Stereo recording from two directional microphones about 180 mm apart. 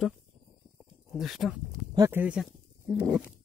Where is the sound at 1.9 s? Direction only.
15° right (ahead or behind).